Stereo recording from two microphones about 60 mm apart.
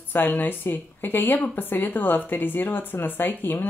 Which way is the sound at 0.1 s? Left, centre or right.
Left.